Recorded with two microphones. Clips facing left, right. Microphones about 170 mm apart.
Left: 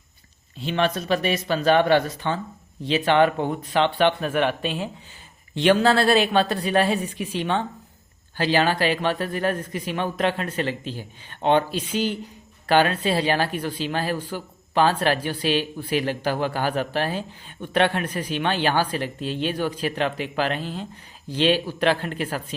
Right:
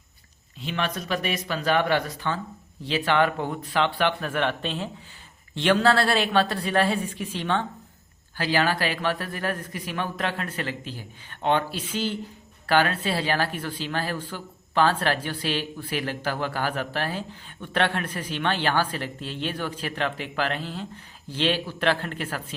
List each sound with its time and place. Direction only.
0.6 s a woman's voice: 30° left (ahead or behind)